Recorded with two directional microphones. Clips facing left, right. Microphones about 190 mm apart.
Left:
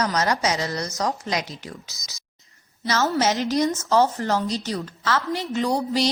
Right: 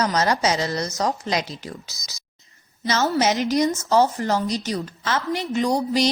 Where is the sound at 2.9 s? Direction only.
15° right (ahead or behind).